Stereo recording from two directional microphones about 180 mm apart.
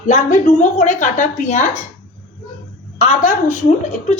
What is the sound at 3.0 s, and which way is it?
Speech, 40° left (ahead or behind).